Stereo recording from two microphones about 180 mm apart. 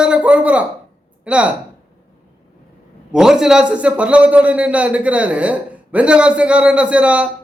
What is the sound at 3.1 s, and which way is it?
A man's voice, 5° right (ahead or behind).